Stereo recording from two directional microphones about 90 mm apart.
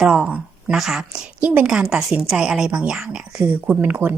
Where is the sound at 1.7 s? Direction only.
5° right (ahead or behind).